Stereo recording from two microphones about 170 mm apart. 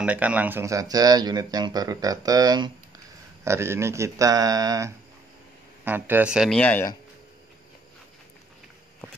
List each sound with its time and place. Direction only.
0.0 s speech: 10° right (ahead or behind)
6.6 s speech: 10° left (ahead or behind)